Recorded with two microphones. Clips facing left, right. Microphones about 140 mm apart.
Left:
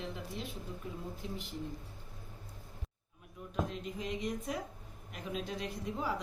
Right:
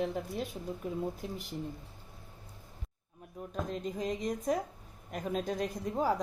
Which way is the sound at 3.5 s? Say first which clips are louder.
Right 1 dB; 40° right (ahead or behind).